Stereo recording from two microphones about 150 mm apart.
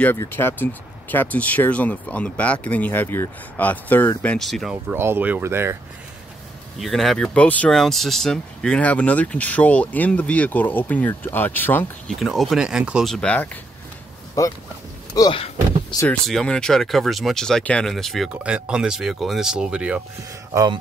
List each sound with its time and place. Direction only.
0.0 s speech: 15° left (ahead or behind); by 4.9 s centre (ahead or behind)
4.9 s speech: 15° right (ahead or behind)
6.8 s speech: centre (ahead or behind)
12.2 s speech: centre (ahead or behind)
15.1 s speech: 30° left (ahead or behind)
16.1 s speech: 5° left (ahead or behind)